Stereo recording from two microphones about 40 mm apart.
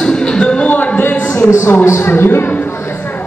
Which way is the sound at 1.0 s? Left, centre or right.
Left.